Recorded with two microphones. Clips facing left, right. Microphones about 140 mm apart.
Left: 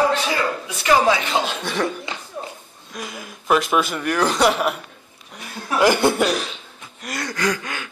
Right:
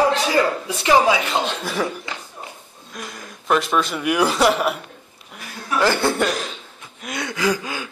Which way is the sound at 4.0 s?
10° right (ahead or behind).